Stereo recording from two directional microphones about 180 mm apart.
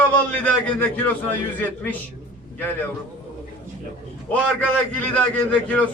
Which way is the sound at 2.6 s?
10° left (ahead or behind).